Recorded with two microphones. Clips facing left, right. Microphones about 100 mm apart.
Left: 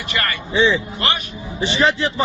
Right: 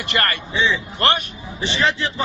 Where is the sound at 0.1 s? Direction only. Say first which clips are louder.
Right 2 dB; 50° right (ahead or behind).